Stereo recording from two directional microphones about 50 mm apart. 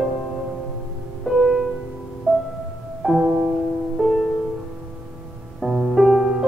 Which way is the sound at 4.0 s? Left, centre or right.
Centre.